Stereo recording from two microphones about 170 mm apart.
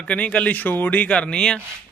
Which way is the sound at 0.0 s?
5° left (ahead or behind).